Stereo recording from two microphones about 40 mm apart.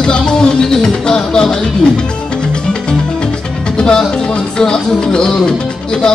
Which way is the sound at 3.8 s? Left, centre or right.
Left.